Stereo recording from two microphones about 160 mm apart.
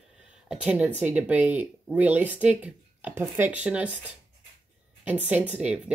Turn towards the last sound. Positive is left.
turn(degrees=-5)  # may be behind; listen again after turning